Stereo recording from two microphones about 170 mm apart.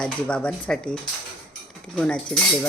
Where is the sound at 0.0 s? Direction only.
5° left (ahead or behind).